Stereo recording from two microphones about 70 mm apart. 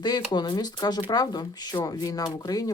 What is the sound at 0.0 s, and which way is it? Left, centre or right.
Speech, left.